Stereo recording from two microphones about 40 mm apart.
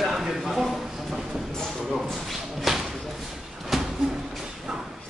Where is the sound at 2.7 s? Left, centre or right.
Centre.